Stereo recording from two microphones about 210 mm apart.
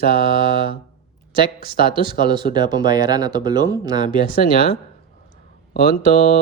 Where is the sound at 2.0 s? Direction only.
20° right (ahead or behind).